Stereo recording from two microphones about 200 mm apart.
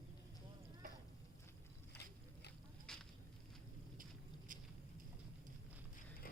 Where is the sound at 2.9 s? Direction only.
5° left (ahead or behind).